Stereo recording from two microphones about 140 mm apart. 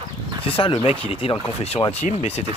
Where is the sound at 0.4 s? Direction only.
40° left (ahead or behind).